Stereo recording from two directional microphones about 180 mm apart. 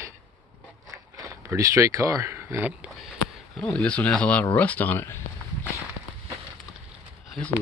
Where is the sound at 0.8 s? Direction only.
20° right (ahead or behind); by 4.4 s 5° left (ahead or behind).